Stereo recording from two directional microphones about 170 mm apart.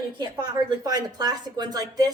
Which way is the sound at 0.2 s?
25° right (ahead or behind).